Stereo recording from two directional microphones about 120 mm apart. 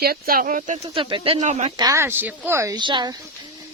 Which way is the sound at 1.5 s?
70° right (ahead or behind).